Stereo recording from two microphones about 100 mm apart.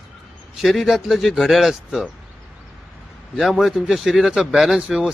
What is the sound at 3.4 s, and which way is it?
Speech, centre (ahead or behind).